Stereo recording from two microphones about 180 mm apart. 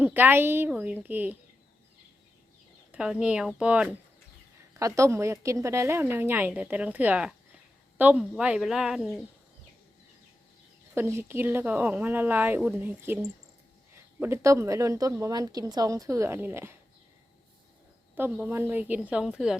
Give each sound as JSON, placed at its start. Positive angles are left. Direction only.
{"t": 0.0, "sound": "speech", "side_deg": -10}
{"t": 2.9, "sound": "speech", "side_deg": -5}
{"t": 4.8, "sound": "speech", "side_deg": -15}
{"t": 10.9, "sound": "speech", "side_deg": -15}
{"t": 18.1, "sound": "speech", "side_deg": -10}